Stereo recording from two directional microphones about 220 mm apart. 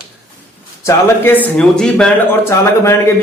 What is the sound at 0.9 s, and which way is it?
Speech, 10° left (ahead or behind).